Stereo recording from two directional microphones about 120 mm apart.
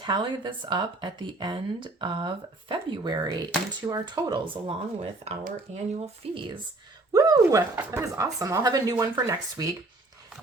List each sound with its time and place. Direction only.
0.0 s speech: 40° right (ahead or behind)
5.2 s speech: 65° right (ahead or behind)
6.2 s speech: 55° right (ahead or behind)
7.1 s speech: 30° right (ahead or behind)